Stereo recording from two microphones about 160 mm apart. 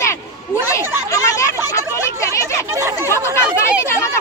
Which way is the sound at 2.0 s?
20° left (ahead or behind).